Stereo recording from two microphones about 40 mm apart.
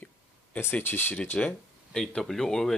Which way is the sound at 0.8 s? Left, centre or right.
Left.